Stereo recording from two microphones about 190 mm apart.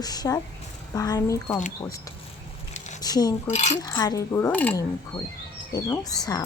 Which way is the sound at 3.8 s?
20° left (ahead or behind).